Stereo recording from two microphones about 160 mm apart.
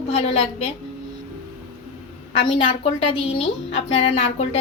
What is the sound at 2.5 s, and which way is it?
A woman's voice, 40° left (ahead or behind).